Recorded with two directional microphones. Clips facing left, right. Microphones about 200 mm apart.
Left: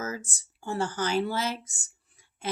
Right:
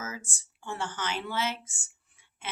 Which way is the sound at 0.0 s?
40° left (ahead or behind).